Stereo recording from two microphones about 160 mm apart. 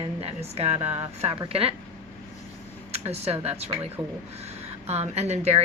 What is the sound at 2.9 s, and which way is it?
Speech, 40° right (ahead or behind).